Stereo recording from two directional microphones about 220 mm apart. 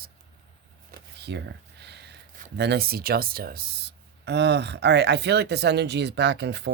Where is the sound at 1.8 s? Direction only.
50° right (ahead or behind).